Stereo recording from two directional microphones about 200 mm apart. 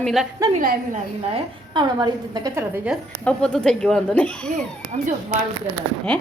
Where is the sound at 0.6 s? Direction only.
45° right (ahead or behind).